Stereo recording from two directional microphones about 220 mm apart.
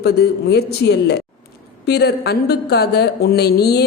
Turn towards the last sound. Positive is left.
turn(degrees=45)  # may be behind; listen again after turning